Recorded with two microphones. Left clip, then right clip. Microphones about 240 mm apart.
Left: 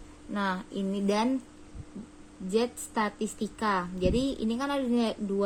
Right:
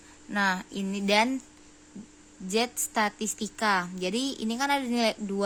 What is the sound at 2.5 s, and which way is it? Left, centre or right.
A woman's voice, right.